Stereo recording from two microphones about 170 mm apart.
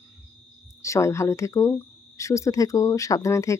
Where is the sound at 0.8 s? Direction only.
15° left (ahead or behind).